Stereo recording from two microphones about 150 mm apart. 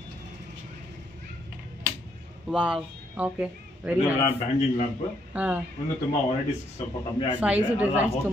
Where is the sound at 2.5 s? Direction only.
5° right (ahead or behind).